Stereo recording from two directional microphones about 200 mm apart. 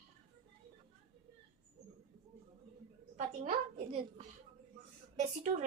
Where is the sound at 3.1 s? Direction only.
30° right (ahead or behind).